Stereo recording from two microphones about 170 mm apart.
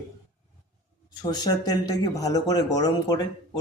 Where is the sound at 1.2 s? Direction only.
25° left (ahead or behind).